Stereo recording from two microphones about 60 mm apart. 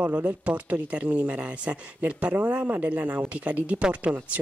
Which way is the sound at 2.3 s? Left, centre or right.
Right.